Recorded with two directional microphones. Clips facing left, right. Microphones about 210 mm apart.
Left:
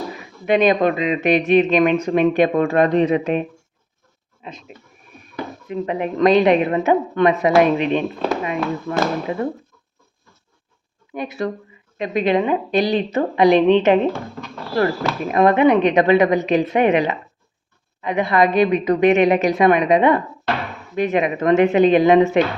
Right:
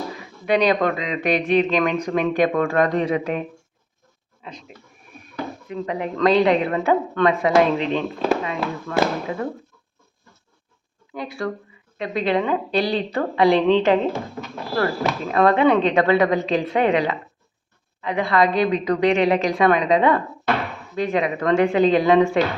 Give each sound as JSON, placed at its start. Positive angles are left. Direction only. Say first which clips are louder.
{"t": 0.4, "sound": "speech", "louder": "left 3 dB", "side_deg": 20}
{"t": 4.4, "sound": "speech", "louder": "left 2 dB", "side_deg": 25}
{"t": 11.1, "sound": "speech", "louder": "left 3 dB", "side_deg": 20}